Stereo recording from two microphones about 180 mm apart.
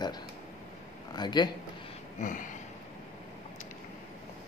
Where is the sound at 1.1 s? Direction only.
25° left (ahead or behind).